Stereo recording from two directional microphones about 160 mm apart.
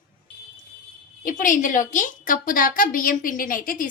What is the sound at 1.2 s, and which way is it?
A woman's voice, 55° left (ahead or behind).